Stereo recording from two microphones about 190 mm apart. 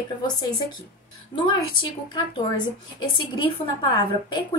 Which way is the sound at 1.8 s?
25° left (ahead or behind).